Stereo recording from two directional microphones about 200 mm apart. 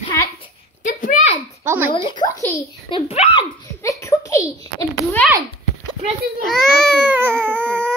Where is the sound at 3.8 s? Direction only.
15° left (ahead or behind).